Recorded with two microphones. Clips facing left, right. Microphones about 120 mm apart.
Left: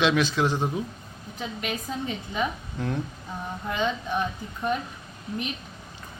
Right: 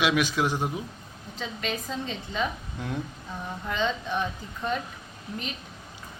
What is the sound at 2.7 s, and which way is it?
Speech, 10° right (ahead or behind).